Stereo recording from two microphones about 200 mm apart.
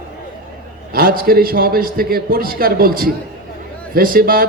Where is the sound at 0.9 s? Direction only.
45° right (ahead or behind).